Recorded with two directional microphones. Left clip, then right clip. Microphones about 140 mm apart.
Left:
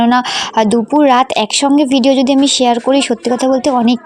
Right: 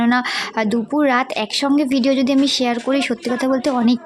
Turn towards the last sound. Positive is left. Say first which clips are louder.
# left 6 dB
turn(degrees=25)  # may be behind; listen again after turning